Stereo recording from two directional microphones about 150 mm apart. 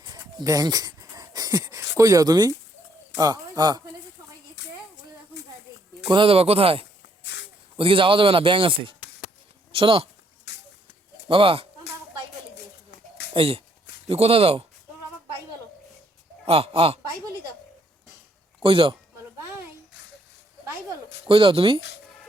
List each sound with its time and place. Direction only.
0.0 s a sound: 25° right (ahead or behind)
3.2 s speech: 25° right (ahead or behind)
6.1 s speech: 35° right (ahead or behind)
11.3 s speech: 35° right (ahead or behind)
13.3 s speech: 40° right (ahead or behind)
16.5 s speech: 40° right (ahead or behind)
18.6 s speech: 35° right (ahead or behind)
21.2 s speech: 35° right (ahead or behind)